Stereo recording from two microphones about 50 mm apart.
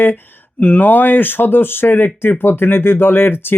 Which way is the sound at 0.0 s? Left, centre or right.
Left.